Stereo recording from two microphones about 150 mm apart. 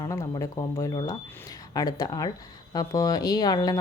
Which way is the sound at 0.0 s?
20° left (ahead or behind).